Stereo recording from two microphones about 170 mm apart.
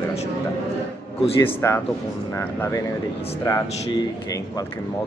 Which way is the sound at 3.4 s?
15° left (ahead or behind).